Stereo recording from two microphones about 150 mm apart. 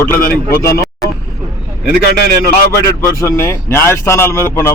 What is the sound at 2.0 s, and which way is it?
Speech, 90° left.